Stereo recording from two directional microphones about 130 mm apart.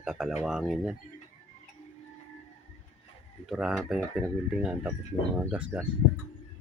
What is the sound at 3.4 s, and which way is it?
Speech, 5° right (ahead or behind).